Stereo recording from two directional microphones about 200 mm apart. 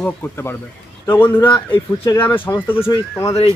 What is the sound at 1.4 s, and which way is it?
Speech, 25° left (ahead or behind).